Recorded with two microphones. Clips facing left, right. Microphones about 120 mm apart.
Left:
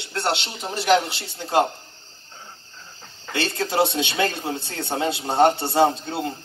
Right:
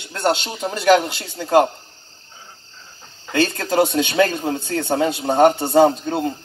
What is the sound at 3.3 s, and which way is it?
Speech, 45° right (ahead or behind).